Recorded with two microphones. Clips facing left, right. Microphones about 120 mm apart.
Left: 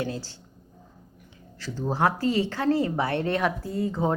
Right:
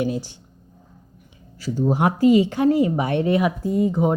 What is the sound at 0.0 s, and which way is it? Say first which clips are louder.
Speech: right 7 dB; 15° right (ahead or behind).